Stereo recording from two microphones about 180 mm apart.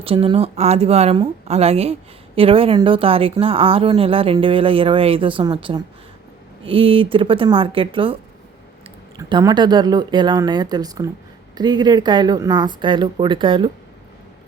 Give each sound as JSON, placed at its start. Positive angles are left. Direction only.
{"t": 0.0, "sound": "a woman's voice", "side_deg": -30}